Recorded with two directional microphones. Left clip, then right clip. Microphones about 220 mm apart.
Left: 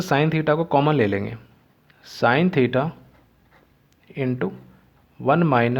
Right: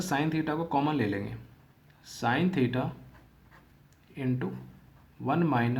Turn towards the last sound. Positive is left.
turn(degrees=35)  # may be behind; listen again after turning